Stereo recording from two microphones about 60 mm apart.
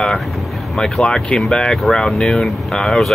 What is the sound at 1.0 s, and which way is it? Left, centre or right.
Speech, centre.